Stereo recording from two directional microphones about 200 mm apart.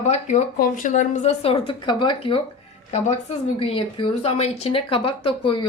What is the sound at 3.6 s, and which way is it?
Speech, 25° left (ahead or behind).